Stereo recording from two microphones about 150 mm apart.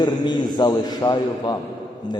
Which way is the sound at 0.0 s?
30° left (ahead or behind).